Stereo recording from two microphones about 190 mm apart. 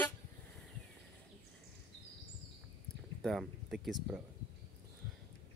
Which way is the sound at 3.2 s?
Centre (ahead or behind).